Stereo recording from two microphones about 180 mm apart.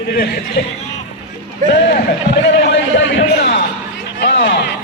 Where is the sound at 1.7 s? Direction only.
70° left (ahead or behind).